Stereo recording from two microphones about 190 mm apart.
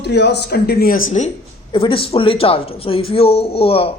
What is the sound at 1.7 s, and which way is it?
Speech, 25° left (ahead or behind).